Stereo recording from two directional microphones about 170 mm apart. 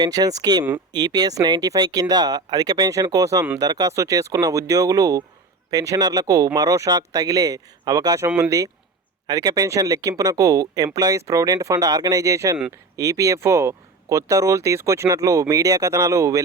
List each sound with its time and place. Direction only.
0.0 s speech: 20° right (ahead or behind)